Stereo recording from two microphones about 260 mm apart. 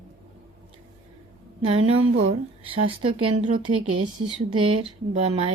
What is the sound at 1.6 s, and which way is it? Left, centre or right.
Speech, right.